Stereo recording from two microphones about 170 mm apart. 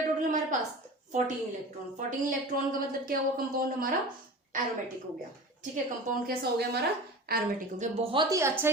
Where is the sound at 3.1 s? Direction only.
55° right (ahead or behind).